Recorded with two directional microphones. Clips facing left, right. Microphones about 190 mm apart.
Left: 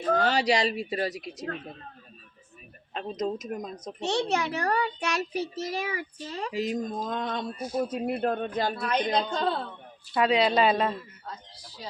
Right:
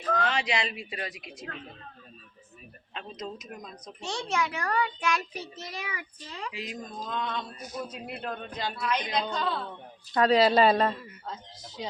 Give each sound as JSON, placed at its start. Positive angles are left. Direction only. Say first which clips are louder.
{"t": 0.0, "sound": "a child's voice", "louder": "left 4 dB", "side_deg": 40}
{"t": 2.9, "sound": "a child's voice", "louder": "left 8 dB", "side_deg": 40}
{"t": 7.6, "sound": "a child's voice", "louder": "left 8 dB", "side_deg": 30}
{"t": 7.9, "sound": "a man's voice", "louder": "left 9 dB", "side_deg": 50}
{"t": 10.1, "sound": "a woman's voice", "louder": "right 2 dB", "side_deg": 5}
{"t": 11.3, "sound": "speech", "louder": "right 5 dB", "side_deg": -20}